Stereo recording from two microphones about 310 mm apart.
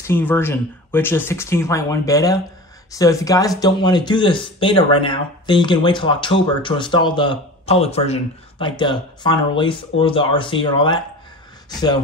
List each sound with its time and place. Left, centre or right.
0.0 s speech: centre